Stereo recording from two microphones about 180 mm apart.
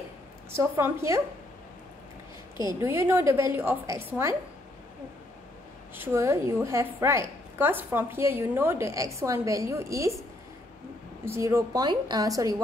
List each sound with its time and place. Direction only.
0.5 s a woman's voice: 15° right (ahead or behind)
2.6 s a woman's voice: 15° right (ahead or behind)
5.9 s a woman's voice: 15° right (ahead or behind)
11.2 s a woman's voice: 15° right (ahead or behind)